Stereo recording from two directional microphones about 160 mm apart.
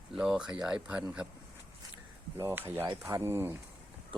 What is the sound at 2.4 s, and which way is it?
Speech, 15° right (ahead or behind).